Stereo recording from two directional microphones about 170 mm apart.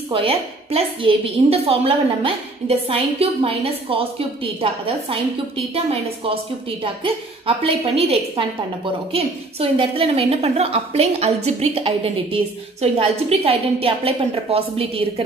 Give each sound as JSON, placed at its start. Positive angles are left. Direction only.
{"t": 0.1, "sound": "a woman's voice", "side_deg": -35}
{"t": 6.8, "sound": "a woman's voice", "side_deg": -30}